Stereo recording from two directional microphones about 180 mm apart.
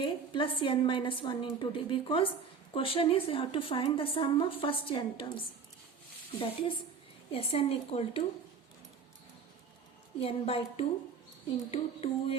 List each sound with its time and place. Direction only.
0.0 s a woman's voice: 30° left (ahead or behind)
6.4 s a woman's voice: 30° left (ahead or behind)
10.2 s a woman's voice: 35° left (ahead or behind)